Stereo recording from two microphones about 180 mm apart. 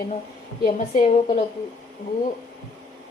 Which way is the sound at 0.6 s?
45° left (ahead or behind).